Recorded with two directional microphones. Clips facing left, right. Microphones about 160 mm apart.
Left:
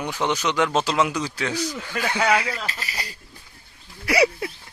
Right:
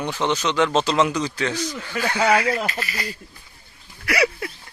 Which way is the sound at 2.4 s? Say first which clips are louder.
Right 7 dB; 50° right (ahead or behind).